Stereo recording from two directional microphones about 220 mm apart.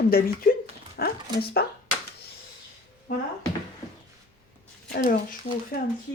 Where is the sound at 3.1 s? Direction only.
40° left (ahead or behind).